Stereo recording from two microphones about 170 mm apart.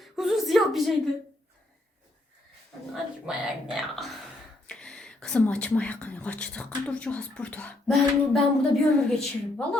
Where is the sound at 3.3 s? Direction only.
Centre (ahead or behind).